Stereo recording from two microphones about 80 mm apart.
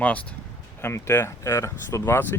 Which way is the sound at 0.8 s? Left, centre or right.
Left.